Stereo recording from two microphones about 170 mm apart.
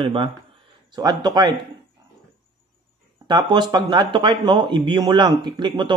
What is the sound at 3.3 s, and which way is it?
Speech, 25° right (ahead or behind).